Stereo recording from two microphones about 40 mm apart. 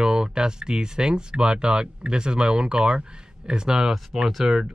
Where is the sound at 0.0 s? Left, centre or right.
Centre.